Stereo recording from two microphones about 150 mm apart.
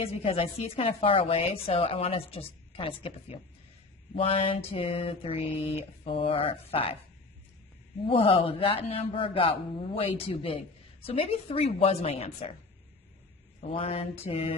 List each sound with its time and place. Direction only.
0.0 s speech: 40° left (ahead or behind)
8.1 s speech: 35° left (ahead or behind)
13.6 s mantra: 40° left (ahead or behind)